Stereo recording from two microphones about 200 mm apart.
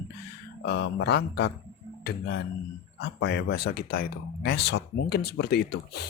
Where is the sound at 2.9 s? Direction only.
60° left (ahead or behind).